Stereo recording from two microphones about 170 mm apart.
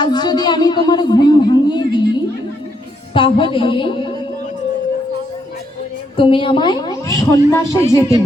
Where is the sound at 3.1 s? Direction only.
30° left (ahead or behind).